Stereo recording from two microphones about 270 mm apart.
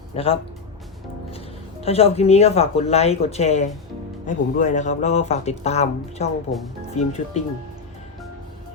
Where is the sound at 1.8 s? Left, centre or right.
Left.